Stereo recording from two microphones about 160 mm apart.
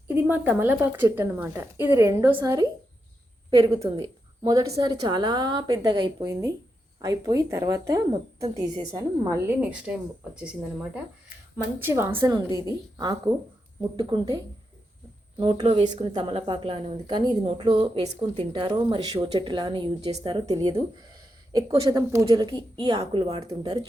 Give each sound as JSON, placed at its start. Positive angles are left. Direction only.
{"t": 0.1, "sound": "a woman's voice", "side_deg": -10}
{"t": 3.8, "sound": "a woman's voice", "side_deg": -20}
{"t": 9.6, "sound": "a woman's voice", "side_deg": -5}
{"t": 12.1, "sound": "a woman's voice", "side_deg": -25}
{"t": 12.5, "sound": "a woman's voice", "side_deg": 25}
{"t": 13.3, "sound": "a woman's voice", "side_deg": -20}
{"t": 15.4, "sound": "a woman's voice", "side_deg": -30}
{"t": 15.6, "sound": "speech", "side_deg": -40}
{"t": 21.7, "sound": "a woman's voice", "side_deg": -30}